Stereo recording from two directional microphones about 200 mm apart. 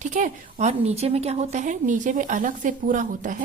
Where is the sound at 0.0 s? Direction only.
40° right (ahead or behind).